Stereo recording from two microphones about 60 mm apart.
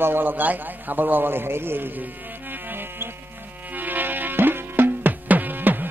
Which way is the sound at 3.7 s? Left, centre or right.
Right.